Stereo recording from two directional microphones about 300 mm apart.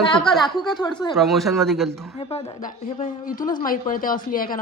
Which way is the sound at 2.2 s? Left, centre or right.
Centre.